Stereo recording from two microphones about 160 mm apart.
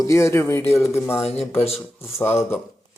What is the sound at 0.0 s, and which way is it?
Speech, 15° left (ahead or behind).